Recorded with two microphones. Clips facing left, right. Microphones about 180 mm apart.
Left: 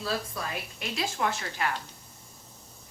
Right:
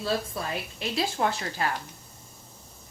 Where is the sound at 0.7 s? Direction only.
35° right (ahead or behind).